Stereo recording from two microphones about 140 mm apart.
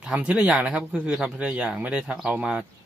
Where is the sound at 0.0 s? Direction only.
5° right (ahead or behind).